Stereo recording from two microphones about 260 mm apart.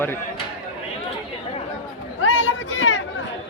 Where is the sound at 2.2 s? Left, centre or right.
Left.